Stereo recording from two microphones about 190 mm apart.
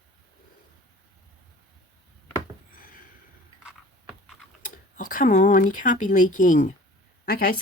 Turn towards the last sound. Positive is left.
turn(degrees=50)  # may be behind; listen again after turning